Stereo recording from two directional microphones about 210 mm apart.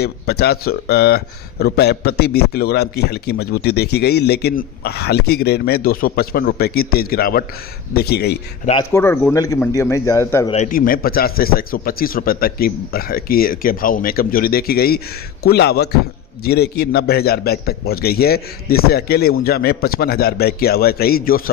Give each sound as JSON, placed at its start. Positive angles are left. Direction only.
{"t": 0.0, "sound": "speech", "side_deg": 50}
{"t": 8.9, "sound": "a man's voice", "side_deg": 10}
{"t": 10.5, "sound": "speech", "side_deg": 35}